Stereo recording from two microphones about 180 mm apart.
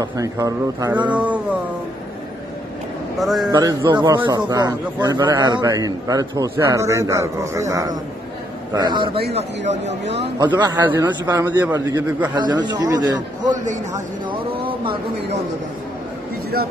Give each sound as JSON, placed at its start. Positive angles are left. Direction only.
{"t": 0.0, "sound": "a man's voice", "side_deg": -20}
{"t": 1.0, "sound": "a man's voice", "side_deg": -10}
{"t": 3.2, "sound": "a man's voice", "side_deg": 0}
{"t": 3.4, "sound": "a man's voice", "side_deg": -20}
{"t": 9.7, "sound": "speech", "side_deg": -35}
{"t": 10.6, "sound": "a man's voice", "side_deg": -20}
{"t": 12.4, "sound": "a man's voice", "side_deg": -25}
{"t": 13.5, "sound": "speech", "side_deg": -45}
{"t": 14.5, "sound": "a sound", "side_deg": -30}